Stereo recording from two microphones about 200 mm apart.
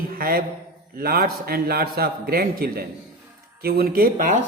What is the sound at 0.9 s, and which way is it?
A man's voice, 45° right (ahead or behind).